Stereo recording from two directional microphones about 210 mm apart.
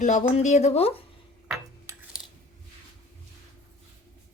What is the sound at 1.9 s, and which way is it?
Cutlery, 15° right (ahead or behind).